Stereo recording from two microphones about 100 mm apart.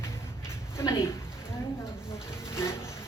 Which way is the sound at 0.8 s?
25° left (ahead or behind).